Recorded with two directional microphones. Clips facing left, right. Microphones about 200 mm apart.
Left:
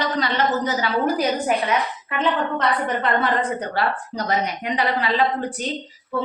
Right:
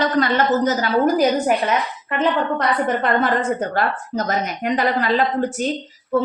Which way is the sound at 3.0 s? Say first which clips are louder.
Right 2 dB; 45° right (ahead or behind).